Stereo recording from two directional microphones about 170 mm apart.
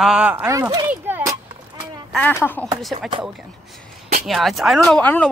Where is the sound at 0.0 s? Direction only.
5° right (ahead or behind); by 0.8 s 20° right (ahead or behind).